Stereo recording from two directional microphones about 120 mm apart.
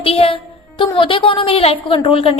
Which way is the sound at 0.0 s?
50° left (ahead or behind).